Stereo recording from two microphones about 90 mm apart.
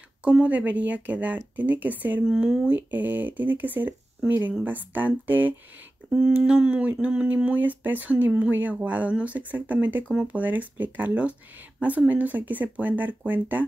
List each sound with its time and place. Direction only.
0.2 s speech: 15° right (ahead or behind)
2.2 s speech: 5° right (ahead or behind)
2.9 s speech: 20° right (ahead or behind)
6.0 s a sound: 10° right (ahead or behind)
6.4 s speech: 10° right (ahead or behind)